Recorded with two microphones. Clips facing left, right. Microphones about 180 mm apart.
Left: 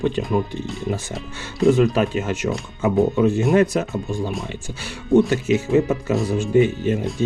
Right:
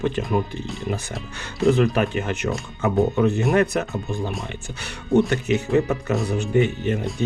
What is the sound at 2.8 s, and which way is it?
Speech, 15° left (ahead or behind).